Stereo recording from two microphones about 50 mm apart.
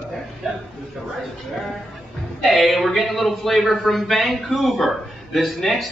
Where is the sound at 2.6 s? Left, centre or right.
Centre.